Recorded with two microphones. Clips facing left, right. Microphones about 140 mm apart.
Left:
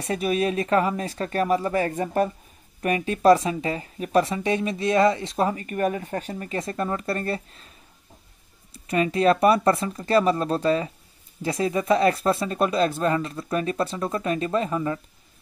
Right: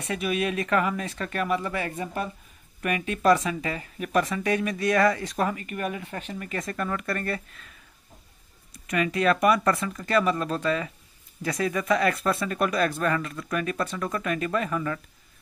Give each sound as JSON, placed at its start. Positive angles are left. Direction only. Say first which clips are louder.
{"t": 0.0, "sound": "speech", "louder": "left 4 dB", "side_deg": 35}
{"t": 2.8, "sound": "speech", "louder": "left 4 dB", "side_deg": 35}
{"t": 8.7, "sound": "speech", "louder": "left 3 dB", "side_deg": 30}